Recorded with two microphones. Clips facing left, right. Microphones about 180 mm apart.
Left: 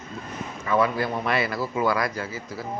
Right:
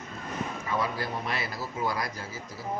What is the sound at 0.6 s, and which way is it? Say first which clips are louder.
A man's voice: left 10 dB; 75° left (ahead or behind).